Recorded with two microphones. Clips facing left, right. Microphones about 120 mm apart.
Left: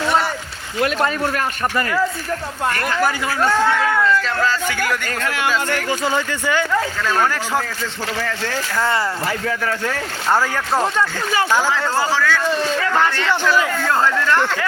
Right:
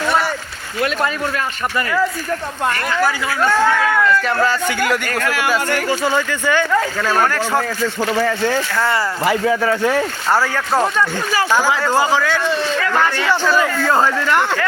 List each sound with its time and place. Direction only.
3.0 s speech: 15° left (ahead or behind)
4.4 s speech: 10° right (ahead or behind)
6.1 s speech: 15° left (ahead or behind)
7.1 s speech: 15° right (ahead or behind)
11.9 s speech: 15° right (ahead or behind)